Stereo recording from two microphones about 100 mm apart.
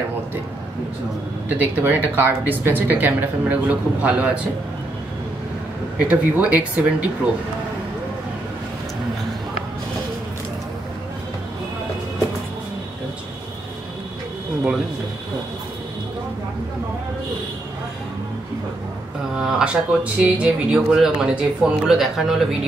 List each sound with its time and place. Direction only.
1.6 s speech: 20° right (ahead or behind)
5.9 s speech: 15° right (ahead or behind)
19.3 s speech: 10° right (ahead or behind)